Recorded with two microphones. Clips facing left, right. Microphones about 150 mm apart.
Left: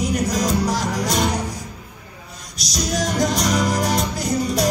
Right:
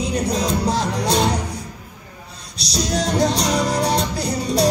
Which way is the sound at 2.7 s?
30° right (ahead or behind).